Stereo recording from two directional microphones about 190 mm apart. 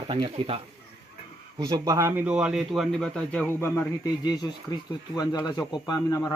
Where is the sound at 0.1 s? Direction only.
30° right (ahead or behind); by 3.4 s 5° left (ahead or behind).